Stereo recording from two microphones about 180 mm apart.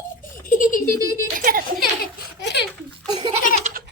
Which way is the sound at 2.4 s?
70° left (ahead or behind).